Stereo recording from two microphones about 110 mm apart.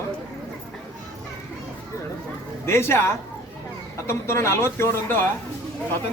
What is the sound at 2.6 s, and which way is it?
Speech, 20° left (ahead or behind).